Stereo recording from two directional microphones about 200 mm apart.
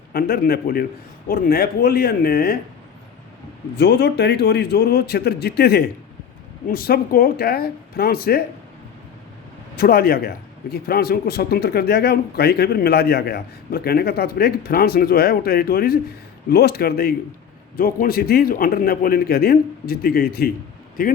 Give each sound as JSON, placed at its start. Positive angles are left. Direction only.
{"t": 0.1, "sound": "a man's voice", "side_deg": 50}
{"t": 3.8, "sound": "a man's voice", "side_deg": 60}
{"t": 9.7, "sound": "a man's voice", "side_deg": 50}